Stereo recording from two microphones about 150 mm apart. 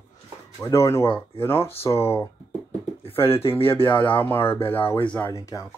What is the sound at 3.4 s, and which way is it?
Speech, 40° left (ahead or behind).